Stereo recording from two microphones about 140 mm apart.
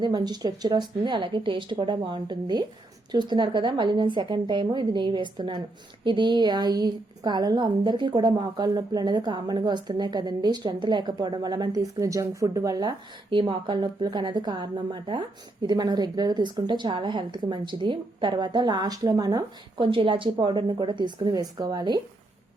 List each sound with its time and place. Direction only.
0.0 s a woman's voice: 30° right (ahead or behind)
13.3 s a woman's voice: 35° right (ahead or behind)